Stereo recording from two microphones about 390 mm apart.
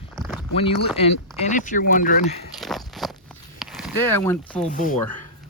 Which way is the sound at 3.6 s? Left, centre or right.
Centre.